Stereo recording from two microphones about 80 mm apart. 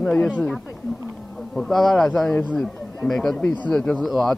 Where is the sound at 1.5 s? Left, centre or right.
Centre.